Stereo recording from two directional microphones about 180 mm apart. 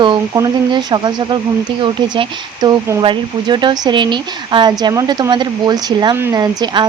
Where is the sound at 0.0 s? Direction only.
25° right (ahead or behind).